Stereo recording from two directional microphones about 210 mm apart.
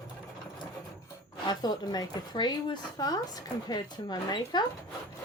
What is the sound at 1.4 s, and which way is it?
Speech, 20° left (ahead or behind).